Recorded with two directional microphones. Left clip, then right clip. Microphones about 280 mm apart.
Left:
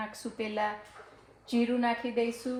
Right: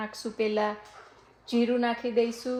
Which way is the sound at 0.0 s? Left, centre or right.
Right.